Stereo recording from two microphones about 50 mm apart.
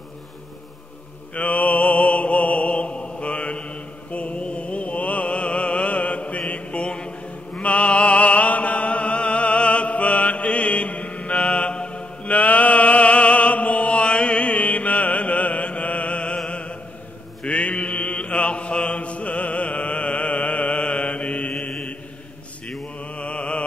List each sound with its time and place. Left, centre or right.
1.4 s mantra: left
22.9 s mantra: left